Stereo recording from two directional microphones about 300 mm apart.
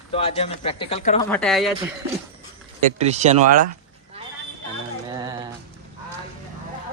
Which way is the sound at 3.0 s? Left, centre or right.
Right.